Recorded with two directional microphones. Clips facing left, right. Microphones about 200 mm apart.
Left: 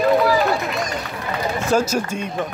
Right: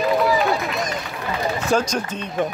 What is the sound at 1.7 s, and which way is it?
Speech, 5° left (ahead or behind).